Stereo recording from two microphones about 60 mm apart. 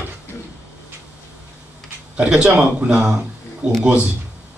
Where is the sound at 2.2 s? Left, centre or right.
Centre.